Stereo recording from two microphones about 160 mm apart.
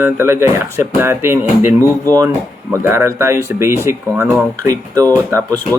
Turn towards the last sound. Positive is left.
turn(degrees=-15)  # may be behind; listen again after turning